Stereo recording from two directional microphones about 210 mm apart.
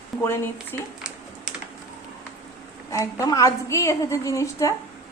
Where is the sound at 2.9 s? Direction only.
15° left (ahead or behind).